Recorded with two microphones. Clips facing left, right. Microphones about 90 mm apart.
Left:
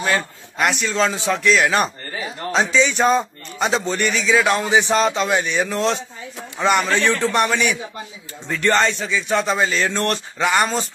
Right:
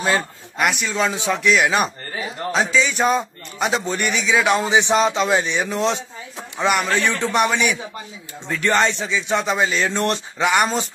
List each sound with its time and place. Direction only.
0.6 s a man's voice: 5° right (ahead or behind)
7.2 s a man's voice: 15° right (ahead or behind)
8.8 s a man's voice: 20° right (ahead or behind)